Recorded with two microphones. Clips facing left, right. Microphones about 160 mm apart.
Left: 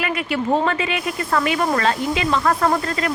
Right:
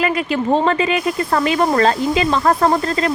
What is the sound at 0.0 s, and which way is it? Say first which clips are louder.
Speech: right 4 dB; 30° right (ahead or behind).